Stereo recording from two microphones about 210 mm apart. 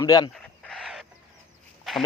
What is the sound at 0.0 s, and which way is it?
Speech, 15° left (ahead or behind).